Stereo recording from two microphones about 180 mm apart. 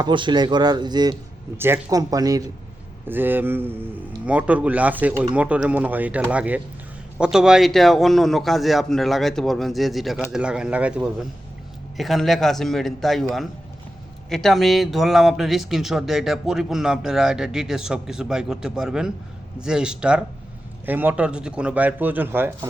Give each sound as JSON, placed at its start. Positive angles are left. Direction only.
{"t": 0.0, "sound": "speech", "side_deg": -25}
{"t": 1.5, "sound": "speech", "side_deg": -15}
{"t": 14.3, "sound": "speech", "side_deg": 0}